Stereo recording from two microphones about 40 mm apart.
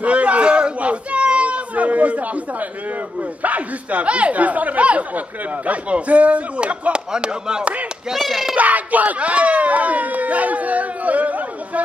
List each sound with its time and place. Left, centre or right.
0.0 s children playing: right
3.2 s speech: right
8.1 s speech: centre
8.5 s a sound: right